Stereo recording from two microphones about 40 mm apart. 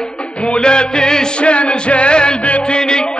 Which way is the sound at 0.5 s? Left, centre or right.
Left.